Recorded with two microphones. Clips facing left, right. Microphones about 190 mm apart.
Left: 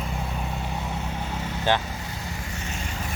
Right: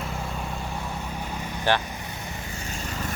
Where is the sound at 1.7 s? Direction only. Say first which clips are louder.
Even; 20° left (ahead or behind).